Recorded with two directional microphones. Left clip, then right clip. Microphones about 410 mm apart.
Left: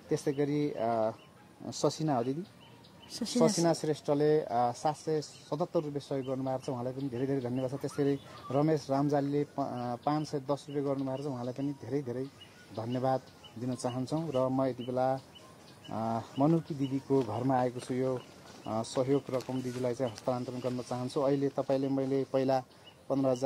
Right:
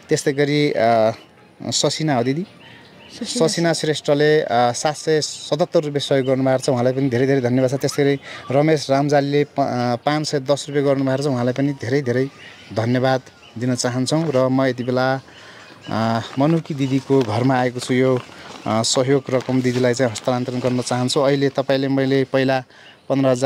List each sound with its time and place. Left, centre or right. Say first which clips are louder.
0.1 s speech: right 13 dB; right
1.7 s speech: right 12 dB; right
3.3 s speech: right 9 dB; right
23.0 s speech: right 12 dB; right